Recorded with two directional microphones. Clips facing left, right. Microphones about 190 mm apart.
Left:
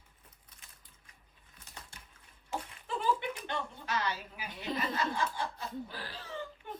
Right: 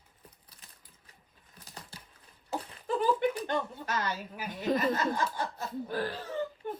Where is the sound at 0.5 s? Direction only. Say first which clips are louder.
Right 2 dB; 35° right (ahead or behind).